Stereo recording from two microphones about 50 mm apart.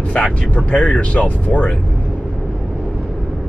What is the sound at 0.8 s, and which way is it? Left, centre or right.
Speech, left.